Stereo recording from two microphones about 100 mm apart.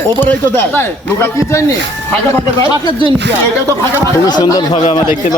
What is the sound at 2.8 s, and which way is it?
Speech, 45° left (ahead or behind).